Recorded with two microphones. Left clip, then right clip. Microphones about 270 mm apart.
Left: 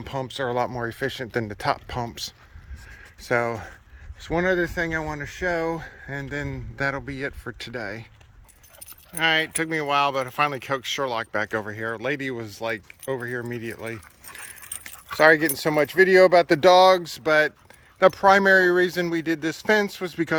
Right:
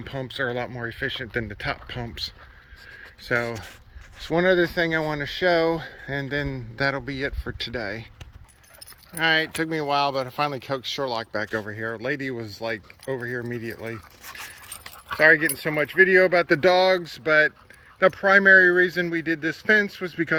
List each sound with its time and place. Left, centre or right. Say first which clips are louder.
0.0 s speech: even; centre
3.2 s speech: left 2 dB; centre
9.1 s speech: even; centre
15.1 s speech: even; centre